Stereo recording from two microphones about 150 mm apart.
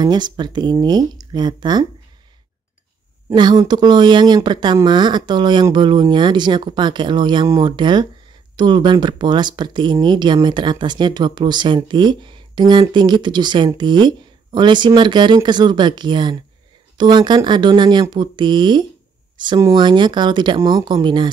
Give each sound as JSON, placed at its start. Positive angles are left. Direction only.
{"t": 0.0, "sound": "speech", "side_deg": -30}
{"t": 3.3, "sound": "speech", "side_deg": -30}
{"t": 19.3, "sound": "a sound", "side_deg": -30}
{"t": 19.6, "sound": "speech", "side_deg": -30}